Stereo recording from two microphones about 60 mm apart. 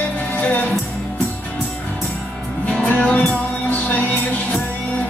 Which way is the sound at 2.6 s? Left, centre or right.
Left.